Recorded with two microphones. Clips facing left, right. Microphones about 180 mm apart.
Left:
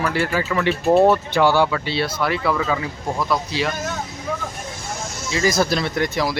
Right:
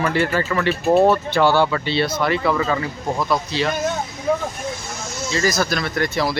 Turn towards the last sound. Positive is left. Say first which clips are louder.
# even
turn(degrees=10)  # may be behind; listen again after turning